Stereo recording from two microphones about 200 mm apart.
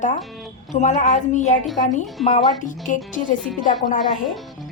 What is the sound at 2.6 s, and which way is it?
Speech, 40° left (ahead or behind).